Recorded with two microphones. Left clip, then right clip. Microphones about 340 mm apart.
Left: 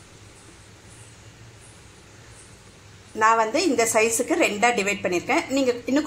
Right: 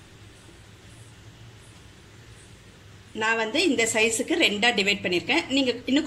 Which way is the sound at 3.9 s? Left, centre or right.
Left.